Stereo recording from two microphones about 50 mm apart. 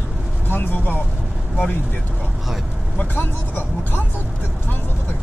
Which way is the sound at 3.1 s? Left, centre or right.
Left.